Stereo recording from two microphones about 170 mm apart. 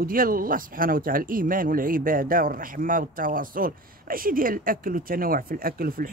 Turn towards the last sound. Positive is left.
turn(degrees=-60)  # may be behind; listen again after turning